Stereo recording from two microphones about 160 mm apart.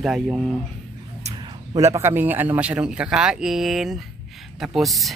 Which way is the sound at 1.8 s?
20° right (ahead or behind).